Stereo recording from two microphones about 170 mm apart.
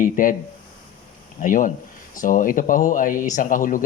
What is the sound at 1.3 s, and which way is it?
Speech, 50° left (ahead or behind).